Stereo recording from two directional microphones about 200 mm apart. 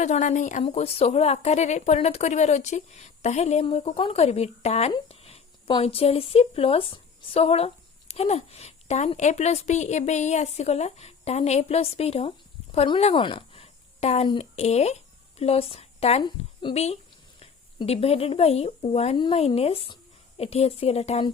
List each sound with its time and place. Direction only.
0.0 s a woman's voice: 35° left (ahead or behind)